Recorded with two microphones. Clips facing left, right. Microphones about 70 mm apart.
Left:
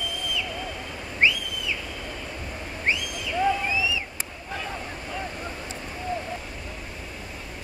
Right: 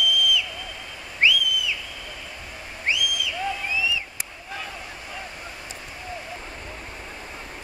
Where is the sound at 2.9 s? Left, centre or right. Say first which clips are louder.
Right 2 dB; left.